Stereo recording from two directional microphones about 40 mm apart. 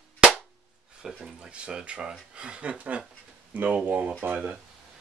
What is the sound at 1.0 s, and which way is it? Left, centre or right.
Speech, centre.